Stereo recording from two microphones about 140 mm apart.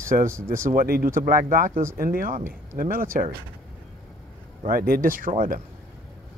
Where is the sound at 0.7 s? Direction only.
90° right.